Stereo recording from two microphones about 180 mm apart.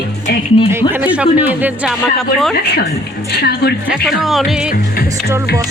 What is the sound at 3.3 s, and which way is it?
Speech, 65° left (ahead or behind).